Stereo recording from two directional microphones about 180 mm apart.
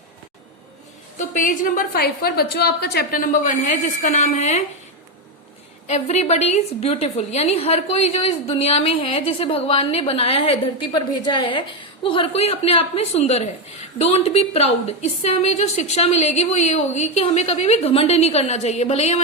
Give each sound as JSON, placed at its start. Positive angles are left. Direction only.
{"t": 1.3, "sound": "a woman's voice", "side_deg": 45}
{"t": 5.9, "sound": "a woman's voice", "side_deg": 40}